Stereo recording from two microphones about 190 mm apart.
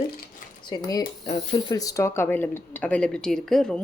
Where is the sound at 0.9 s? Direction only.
25° left (ahead or behind).